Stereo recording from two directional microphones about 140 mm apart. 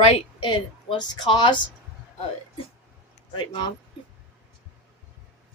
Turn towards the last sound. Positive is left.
turn(degrees=35)  # may be behind; listen again after turning